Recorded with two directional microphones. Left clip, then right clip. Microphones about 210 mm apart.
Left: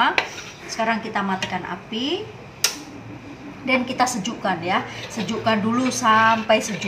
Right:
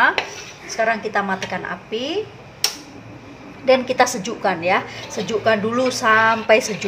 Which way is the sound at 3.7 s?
35° right (ahead or behind).